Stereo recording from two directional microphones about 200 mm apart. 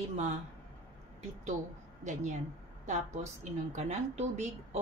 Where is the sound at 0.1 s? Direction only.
35° right (ahead or behind).